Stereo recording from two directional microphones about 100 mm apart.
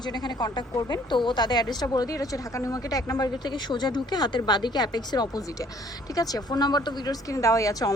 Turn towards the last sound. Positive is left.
turn(degrees=35)  # may be behind; listen again after turning